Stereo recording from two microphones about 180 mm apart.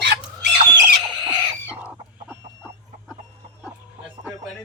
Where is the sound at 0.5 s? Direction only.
25° right (ahead or behind).